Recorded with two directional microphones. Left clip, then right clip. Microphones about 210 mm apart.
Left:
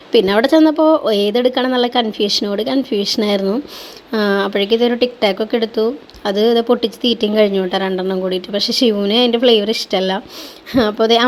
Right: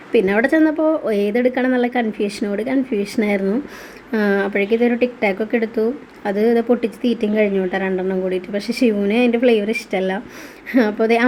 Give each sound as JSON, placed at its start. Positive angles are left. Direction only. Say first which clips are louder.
{"t": 0.1, "sound": "speech", "louder": "left 4 dB", "side_deg": 15}